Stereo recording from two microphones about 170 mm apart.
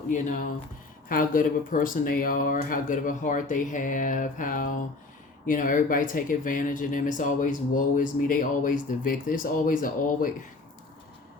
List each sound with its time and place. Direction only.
0.1 s speech: 45° left (ahead or behind)